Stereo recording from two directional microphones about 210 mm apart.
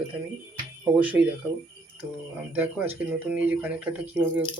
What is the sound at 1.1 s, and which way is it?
Speech, 10° right (ahead or behind).